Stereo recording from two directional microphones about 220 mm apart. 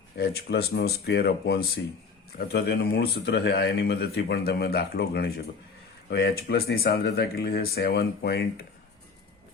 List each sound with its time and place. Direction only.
0.2 s speech: 45° left (ahead or behind)